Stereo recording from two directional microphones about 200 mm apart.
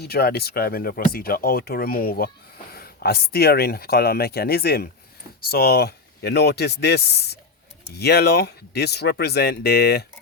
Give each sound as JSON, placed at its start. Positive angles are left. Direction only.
{"t": 0.0, "sound": "speech", "side_deg": 50}